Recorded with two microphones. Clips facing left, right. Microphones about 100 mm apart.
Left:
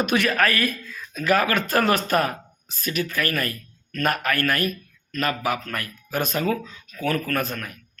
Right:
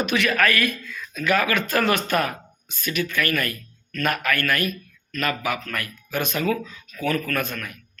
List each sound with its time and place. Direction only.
0.0 s a man's voice: 45° left (ahead or behind)
0.3 s speech: 35° left (ahead or behind)